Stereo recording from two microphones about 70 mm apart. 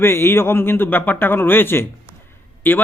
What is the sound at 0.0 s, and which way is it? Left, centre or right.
A man's voice, left.